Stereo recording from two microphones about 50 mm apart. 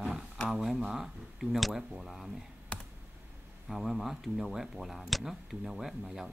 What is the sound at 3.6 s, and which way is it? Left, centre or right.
Speech, centre.